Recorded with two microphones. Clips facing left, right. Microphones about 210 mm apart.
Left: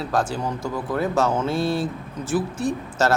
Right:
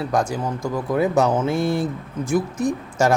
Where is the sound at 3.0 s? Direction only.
10° right (ahead or behind).